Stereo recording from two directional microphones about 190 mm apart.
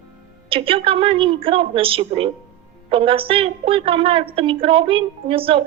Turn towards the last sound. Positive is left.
turn(degrees=-30)  # may be behind; listen again after turning